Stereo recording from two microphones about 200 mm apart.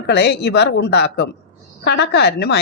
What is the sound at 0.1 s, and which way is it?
A man's voice, 55° left (ahead or behind).